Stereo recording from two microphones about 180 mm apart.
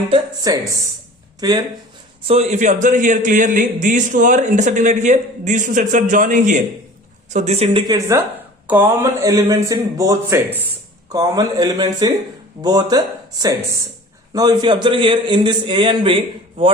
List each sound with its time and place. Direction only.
0.1 s a man's voice: 20° right (ahead or behind)
2.2 s a man's voice: 35° right (ahead or behind)
14.3 s a man's voice: 25° right (ahead or behind)